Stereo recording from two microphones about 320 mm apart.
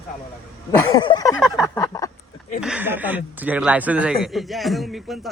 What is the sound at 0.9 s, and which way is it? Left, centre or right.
Speech, centre.